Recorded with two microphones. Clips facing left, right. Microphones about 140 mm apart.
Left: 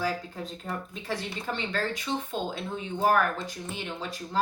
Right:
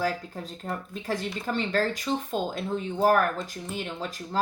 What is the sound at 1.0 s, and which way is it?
Speech, 45° right (ahead or behind).